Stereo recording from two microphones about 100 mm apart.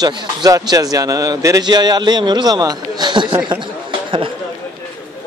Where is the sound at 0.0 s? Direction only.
45° right (ahead or behind).